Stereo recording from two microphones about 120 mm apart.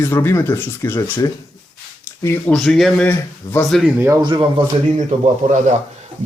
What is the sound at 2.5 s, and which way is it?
Speech, 5° left (ahead or behind).